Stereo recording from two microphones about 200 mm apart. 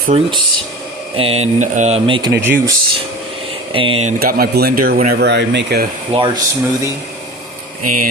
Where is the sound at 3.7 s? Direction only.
25° right (ahead or behind).